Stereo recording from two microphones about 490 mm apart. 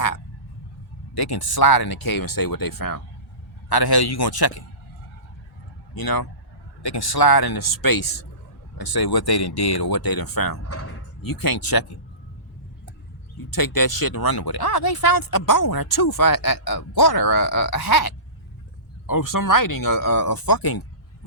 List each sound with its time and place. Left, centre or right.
1.1 s speech: left
5.9 s speech: left
10.6 s speech: left
11.2 s speech: left
13.5 s speech: left